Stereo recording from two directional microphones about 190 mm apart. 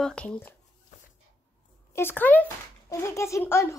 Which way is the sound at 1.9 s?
10° left (ahead or behind).